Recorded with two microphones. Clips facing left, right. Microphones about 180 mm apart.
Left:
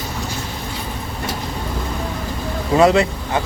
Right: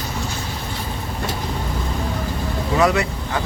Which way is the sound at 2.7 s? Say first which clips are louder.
Left 5 dB; 25° left (ahead or behind).